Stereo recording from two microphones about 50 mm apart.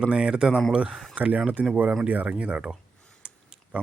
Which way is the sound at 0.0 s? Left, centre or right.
Right.